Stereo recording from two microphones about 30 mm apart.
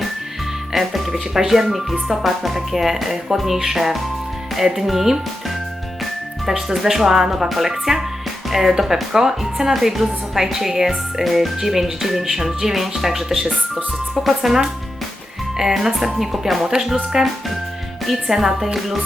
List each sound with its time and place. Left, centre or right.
0.7 s speech: centre
6.7 s speech: centre
15.7 s speech: centre